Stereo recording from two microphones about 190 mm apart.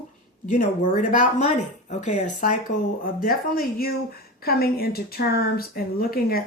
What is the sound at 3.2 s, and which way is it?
Speech, 50° left (ahead or behind).